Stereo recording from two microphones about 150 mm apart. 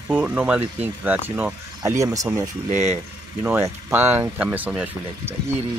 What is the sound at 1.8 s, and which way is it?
Speech, 20° right (ahead or behind).